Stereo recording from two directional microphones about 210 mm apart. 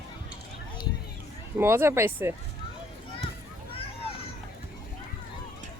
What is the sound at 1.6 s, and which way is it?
Speech, 10° right (ahead or behind).